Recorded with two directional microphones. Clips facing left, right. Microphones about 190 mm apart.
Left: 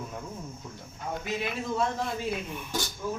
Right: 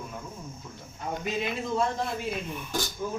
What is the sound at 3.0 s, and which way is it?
Speech, 15° right (ahead or behind).